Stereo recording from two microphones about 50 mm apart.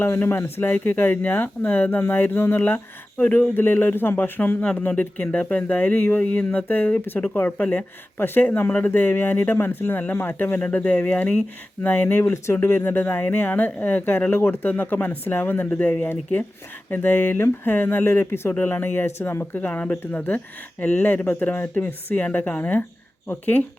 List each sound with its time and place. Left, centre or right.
0.0 s speech: left
2.6 s speech: left
4.2 s speech: left
6.3 s speech: left
6.7 s speech: left
10.6 s speech: left
12.2 s speech: left
12.5 s speech: left
19.5 s speech: left